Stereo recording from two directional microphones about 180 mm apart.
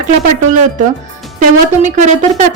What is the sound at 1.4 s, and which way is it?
Speech, 40° right (ahead or behind).